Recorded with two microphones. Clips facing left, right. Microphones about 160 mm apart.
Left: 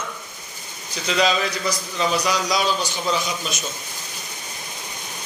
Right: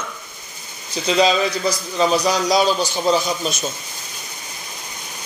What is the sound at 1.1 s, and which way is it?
A man's voice, 30° right (ahead or behind).